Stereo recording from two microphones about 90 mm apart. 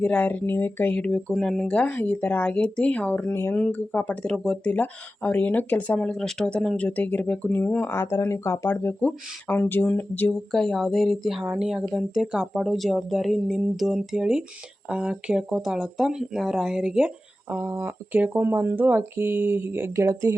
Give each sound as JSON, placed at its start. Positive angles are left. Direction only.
{"t": 0.0, "sound": "speech", "side_deg": 15}
{"t": 1.3, "sound": "speech", "side_deg": 0}
{"t": 8.0, "sound": "speech", "side_deg": 35}
{"t": 10.5, "sound": "a woman's voice", "side_deg": 5}
{"t": 17.5, "sound": "speech", "side_deg": -25}